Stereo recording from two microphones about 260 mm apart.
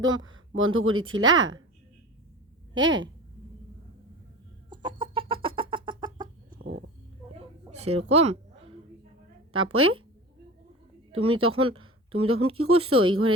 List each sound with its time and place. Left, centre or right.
0.2 s a woman's voice: right
2.7 s a woman's voice: right
4.7 s chicken: centre
6.5 s a sound: right
7.7 s a sound: right
9.7 s a woman's voice: right
11.2 s speech: right